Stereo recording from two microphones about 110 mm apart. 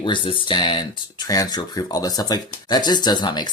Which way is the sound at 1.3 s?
35° left (ahead or behind).